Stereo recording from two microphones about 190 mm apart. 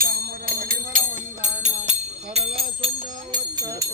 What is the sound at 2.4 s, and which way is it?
Speech, 30° right (ahead or behind).